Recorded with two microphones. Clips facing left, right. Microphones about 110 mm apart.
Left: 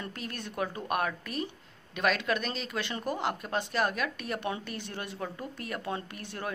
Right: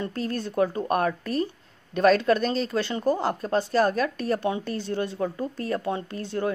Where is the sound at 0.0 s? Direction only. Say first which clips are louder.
Right 10 dB; 35° right (ahead or behind).